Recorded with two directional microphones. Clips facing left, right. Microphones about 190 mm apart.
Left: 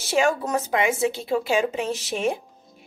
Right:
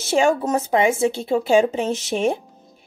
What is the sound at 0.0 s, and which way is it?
A woman's voice, 25° right (ahead or behind).